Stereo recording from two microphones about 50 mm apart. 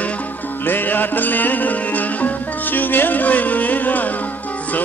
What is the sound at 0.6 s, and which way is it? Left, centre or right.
Music, left.